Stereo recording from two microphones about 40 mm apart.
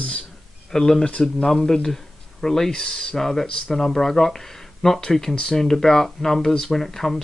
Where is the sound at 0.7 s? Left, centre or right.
Centre.